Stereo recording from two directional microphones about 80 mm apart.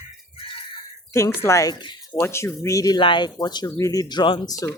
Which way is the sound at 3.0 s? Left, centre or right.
Left.